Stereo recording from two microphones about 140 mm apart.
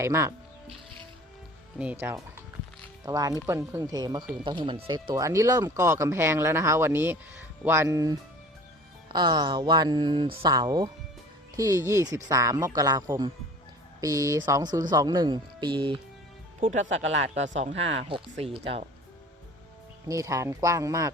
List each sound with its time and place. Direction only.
0.0 s speech: 20° right (ahead or behind)
1.8 s speech: 10° right (ahead or behind); by 16.0 s 35° right (ahead or behind)
16.6 s speech: 65° right (ahead or behind); by 18.8 s 45° right (ahead or behind)
20.1 s speech: 25° right (ahead or behind)